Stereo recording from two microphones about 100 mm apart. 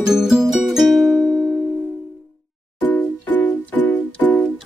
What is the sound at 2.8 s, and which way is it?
Music, 15° left (ahead or behind).